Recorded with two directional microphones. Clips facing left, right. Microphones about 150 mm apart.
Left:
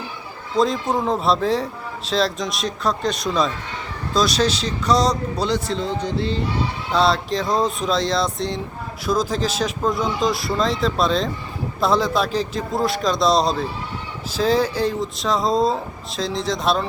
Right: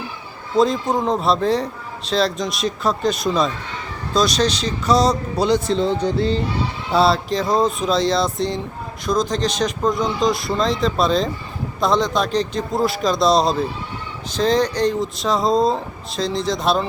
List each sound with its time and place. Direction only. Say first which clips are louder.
0.5 s a man's voice: right 2 dB; centre (ahead or behind)
5.5 s speech: right 8 dB; 20° right (ahead or behind)
6.9 s a man's voice: right 2 dB; 5° right (ahead or behind)